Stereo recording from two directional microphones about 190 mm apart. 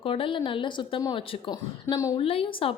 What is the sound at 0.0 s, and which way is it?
A woman's voice, 30° left (ahead or behind).